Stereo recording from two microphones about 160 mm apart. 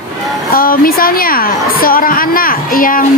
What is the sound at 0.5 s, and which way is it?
A woman's voice, 65° left (ahead or behind).